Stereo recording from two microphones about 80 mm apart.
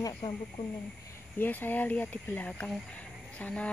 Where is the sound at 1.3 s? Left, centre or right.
Left.